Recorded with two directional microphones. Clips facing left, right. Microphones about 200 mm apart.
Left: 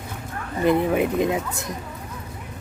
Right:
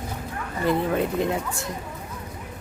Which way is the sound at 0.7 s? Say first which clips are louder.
Left 3 dB; 15° left (ahead or behind).